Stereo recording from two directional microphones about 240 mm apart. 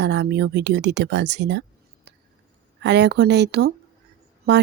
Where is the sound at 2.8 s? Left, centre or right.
Right.